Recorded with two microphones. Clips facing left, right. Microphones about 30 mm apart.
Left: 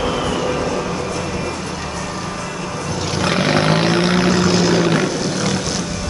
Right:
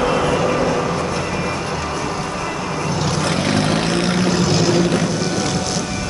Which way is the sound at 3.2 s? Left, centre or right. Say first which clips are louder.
Left 5 dB; centre.